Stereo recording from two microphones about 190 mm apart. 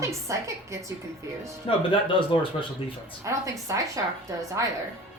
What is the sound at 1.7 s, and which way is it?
Speech, 25° left (ahead or behind).